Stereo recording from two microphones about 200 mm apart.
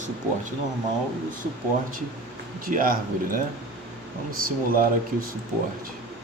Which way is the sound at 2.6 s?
45° right (ahead or behind).